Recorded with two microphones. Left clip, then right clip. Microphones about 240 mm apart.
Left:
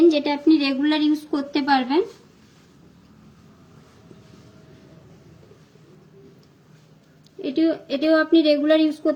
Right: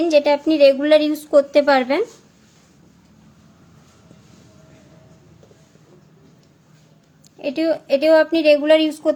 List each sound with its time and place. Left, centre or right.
0.1 s a woman's voice: right
7.6 s a woman's voice: right